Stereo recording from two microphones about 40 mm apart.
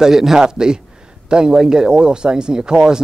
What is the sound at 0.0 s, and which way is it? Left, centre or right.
A man's voice, centre.